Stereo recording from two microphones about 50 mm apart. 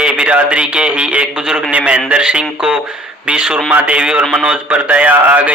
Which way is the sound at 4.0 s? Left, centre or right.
Centre.